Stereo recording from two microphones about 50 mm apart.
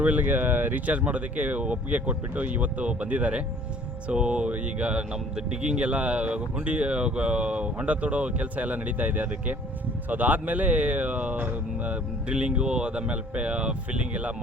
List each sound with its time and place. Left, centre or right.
0.0 s speech: right
12.4 s speech: centre